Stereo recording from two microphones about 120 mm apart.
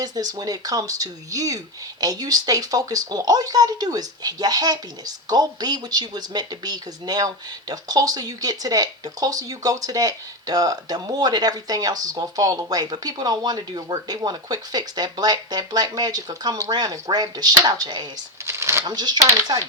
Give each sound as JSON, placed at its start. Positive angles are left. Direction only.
{"t": 0.0, "sound": "speech", "side_deg": -30}
{"t": 18.4, "sound": "shuffling cards", "side_deg": -20}
{"t": 18.9, "sound": "speech", "side_deg": -35}